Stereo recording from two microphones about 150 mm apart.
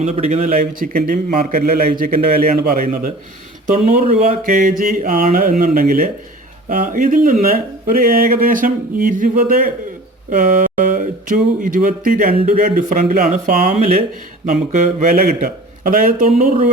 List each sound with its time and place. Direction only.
0.0 s a man's voice: 50° right (ahead or behind); by 3.1 s 65° right (ahead or behind)
4.0 s a man's voice: 45° right (ahead or behind)
15.0 s a man's voice: 60° right (ahead or behind)